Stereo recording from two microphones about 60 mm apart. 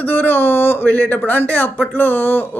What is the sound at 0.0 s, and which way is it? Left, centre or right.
Speech, left.